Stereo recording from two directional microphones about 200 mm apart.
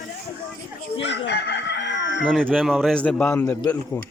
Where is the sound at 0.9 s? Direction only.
65° left (ahead or behind).